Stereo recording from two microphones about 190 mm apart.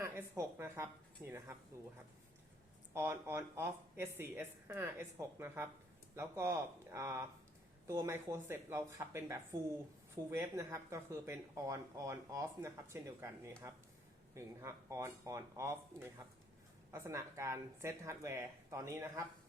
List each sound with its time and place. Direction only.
0.0 s speech: 15° right (ahead or behind)
2.9 s speech: 15° right (ahead or behind)